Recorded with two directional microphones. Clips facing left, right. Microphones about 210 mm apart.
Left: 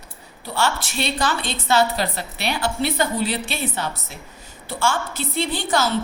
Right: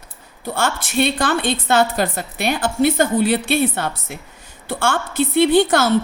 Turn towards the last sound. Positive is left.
turn(degrees=-55)  # may be behind; listen again after turning